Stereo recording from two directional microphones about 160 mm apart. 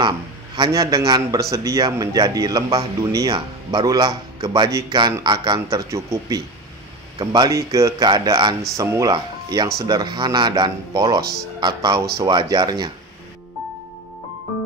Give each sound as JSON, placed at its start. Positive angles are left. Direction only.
{"t": 0.6, "sound": "speech", "side_deg": -20}